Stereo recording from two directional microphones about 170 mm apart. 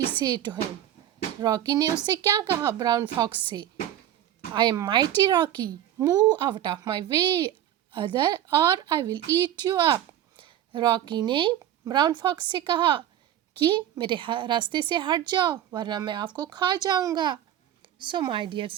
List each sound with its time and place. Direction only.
0.2 s a woman's voice: 25° right (ahead or behind)